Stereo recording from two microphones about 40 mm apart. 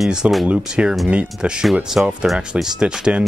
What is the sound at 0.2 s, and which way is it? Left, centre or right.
Speech, right.